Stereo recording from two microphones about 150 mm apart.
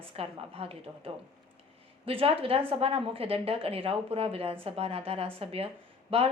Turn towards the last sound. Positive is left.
turn(degrees=-40)  # may be behind; listen again after turning